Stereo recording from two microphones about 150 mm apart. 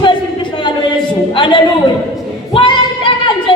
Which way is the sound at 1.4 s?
35° left (ahead or behind).